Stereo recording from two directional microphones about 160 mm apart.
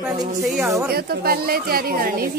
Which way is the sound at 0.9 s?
70° right (ahead or behind).